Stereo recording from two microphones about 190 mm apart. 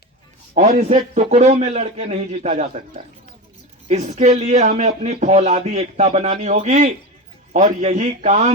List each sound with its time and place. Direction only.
0.5 s a man's voice: 40° right (ahead or behind)